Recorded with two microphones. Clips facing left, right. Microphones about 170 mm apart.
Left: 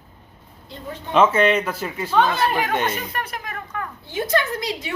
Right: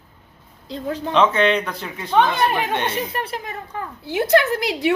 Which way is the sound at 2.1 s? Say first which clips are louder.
Right 2 dB; 20° right (ahead or behind).